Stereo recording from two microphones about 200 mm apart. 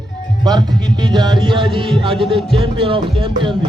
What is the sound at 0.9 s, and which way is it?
Speech, 20° right (ahead or behind).